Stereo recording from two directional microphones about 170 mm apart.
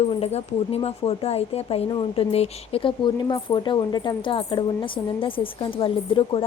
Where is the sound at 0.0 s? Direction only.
40° left (ahead or behind).